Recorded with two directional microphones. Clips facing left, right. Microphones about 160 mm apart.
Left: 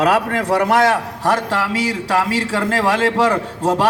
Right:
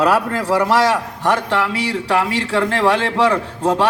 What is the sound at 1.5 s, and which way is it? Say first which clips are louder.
A man's voice: even; 40° left (ahead or behind).